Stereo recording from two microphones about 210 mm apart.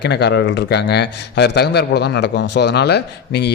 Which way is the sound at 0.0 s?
55° left (ahead or behind).